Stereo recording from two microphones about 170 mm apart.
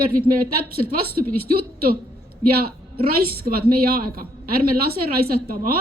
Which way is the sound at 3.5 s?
60° right (ahead or behind).